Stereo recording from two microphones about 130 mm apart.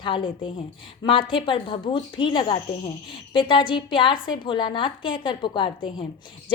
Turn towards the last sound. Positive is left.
turn(degrees=40)  # may be behind; listen again after turning